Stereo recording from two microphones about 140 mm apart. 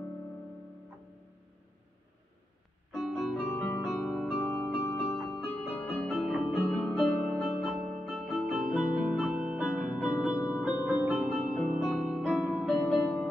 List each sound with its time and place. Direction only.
2.9 s music: centre (ahead or behind)
10.3 s music: 25° left (ahead or behind)
10.6 s music: 10° right (ahead or behind); by 13.3 s 5° left (ahead or behind)